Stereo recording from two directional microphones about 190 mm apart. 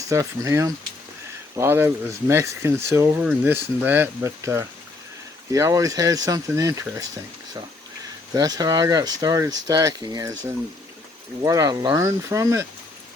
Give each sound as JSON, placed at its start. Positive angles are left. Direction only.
{"t": 0.1, "sound": "speech", "side_deg": -15}
{"t": 8.3, "sound": "speech", "side_deg": -20}